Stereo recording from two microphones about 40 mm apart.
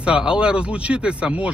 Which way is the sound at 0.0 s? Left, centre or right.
Right.